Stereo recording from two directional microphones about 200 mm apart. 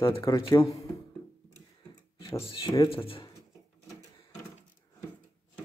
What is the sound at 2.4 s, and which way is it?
Speech, 20° left (ahead or behind).